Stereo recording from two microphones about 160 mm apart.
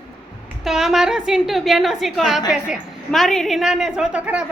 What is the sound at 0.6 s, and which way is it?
A woman's voice, centre (ahead or behind).